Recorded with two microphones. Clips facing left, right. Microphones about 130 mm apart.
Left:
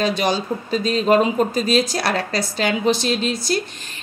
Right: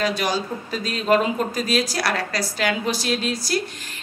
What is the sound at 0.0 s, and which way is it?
A woman's voice, 25° left (ahead or behind).